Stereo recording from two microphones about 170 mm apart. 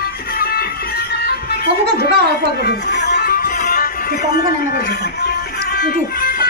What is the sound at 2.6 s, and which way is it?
Music, 80° left.